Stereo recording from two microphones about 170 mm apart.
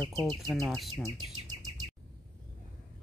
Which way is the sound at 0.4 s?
Centre (ahead or behind).